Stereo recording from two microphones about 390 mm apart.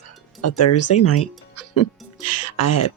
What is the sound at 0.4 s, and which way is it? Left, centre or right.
Speech, left.